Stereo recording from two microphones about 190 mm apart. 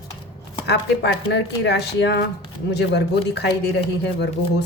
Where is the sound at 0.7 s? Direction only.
65° left (ahead or behind).